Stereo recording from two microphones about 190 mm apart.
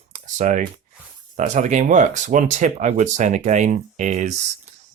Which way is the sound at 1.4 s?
40° right (ahead or behind).